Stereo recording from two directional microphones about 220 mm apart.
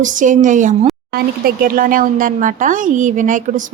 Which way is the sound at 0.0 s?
35° right (ahead or behind).